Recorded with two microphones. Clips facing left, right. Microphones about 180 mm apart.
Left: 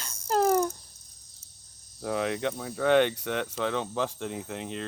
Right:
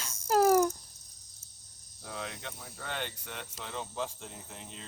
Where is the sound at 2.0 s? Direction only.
70° left (ahead or behind).